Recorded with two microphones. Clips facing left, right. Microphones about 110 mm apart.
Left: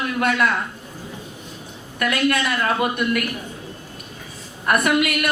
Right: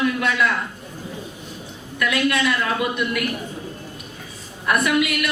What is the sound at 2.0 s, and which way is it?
Speech, 50° left (ahead or behind).